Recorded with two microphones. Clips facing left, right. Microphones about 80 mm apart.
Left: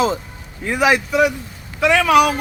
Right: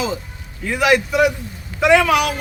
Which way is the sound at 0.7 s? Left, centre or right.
Centre.